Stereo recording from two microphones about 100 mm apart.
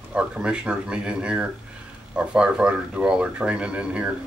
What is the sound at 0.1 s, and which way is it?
Speech, 10° right (ahead or behind).